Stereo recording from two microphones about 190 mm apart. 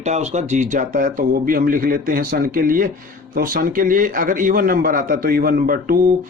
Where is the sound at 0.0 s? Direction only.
35° right (ahead or behind).